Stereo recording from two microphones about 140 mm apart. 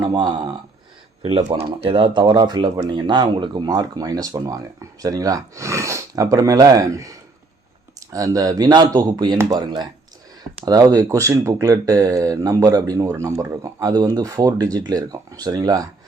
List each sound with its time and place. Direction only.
0.0 s speech: 30° right (ahead or behind)
8.1 s speech: 25° right (ahead or behind)